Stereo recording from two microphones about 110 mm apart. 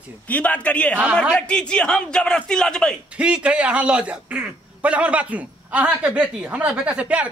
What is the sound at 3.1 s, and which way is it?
A man's voice, 10° right (ahead or behind).